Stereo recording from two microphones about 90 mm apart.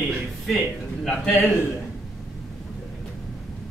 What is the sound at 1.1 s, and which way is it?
Speech, 5° left (ahead or behind).